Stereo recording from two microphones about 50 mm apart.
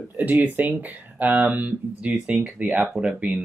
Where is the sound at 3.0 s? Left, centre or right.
Centre.